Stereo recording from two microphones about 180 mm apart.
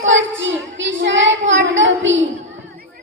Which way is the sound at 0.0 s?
90° right.